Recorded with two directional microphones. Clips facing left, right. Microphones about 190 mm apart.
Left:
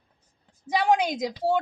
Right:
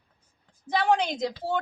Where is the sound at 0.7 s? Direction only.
10° left (ahead or behind).